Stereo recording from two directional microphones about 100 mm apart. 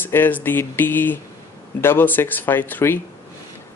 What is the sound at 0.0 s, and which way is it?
Speech, 20° left (ahead or behind).